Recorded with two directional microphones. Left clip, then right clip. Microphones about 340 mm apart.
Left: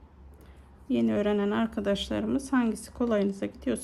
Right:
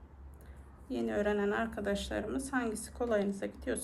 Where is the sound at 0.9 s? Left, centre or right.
Centre.